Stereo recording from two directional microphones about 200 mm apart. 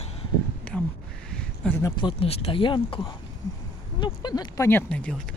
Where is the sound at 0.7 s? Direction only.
5° right (ahead or behind).